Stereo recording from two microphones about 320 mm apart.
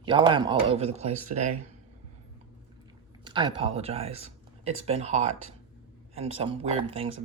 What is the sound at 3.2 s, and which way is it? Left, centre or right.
Speech, centre.